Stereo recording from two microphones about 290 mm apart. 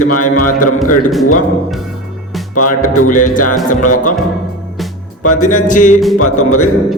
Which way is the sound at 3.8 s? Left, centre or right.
Left.